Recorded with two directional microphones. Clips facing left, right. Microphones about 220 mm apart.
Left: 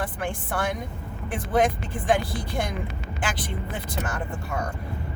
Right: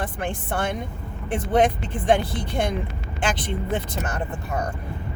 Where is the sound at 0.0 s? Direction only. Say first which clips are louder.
Right 1 dB; 20° right (ahead or behind).